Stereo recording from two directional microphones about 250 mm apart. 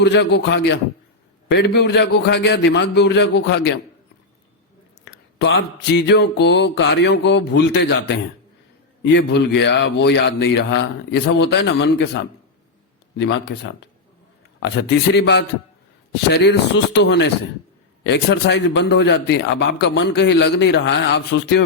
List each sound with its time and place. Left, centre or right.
0.0 s a man's voice: left
5.0 s a man's voice: left